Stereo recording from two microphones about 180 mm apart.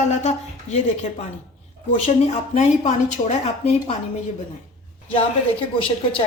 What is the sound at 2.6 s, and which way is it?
A woman's voice, 35° left (ahead or behind).